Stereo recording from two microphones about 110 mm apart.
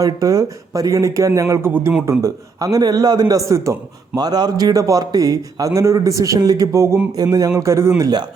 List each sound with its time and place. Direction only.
0.0 s a man's voice: 30° right (ahead or behind)